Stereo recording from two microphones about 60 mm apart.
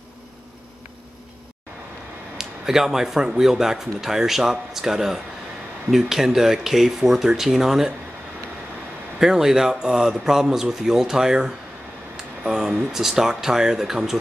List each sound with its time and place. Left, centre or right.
2.3 s speech: centre
9.2 s speech: centre